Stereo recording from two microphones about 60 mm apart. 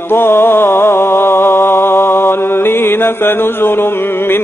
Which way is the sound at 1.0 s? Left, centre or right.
Left.